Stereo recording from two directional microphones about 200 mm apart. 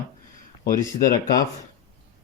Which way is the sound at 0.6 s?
50° left (ahead or behind).